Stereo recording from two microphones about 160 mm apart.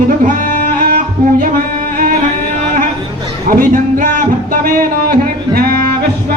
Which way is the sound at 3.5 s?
65° right (ahead or behind).